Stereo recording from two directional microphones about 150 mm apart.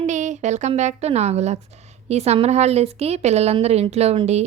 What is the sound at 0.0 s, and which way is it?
A woman's voice, 55° right (ahead or behind).